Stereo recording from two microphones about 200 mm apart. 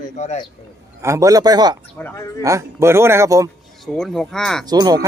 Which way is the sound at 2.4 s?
15° right (ahead or behind).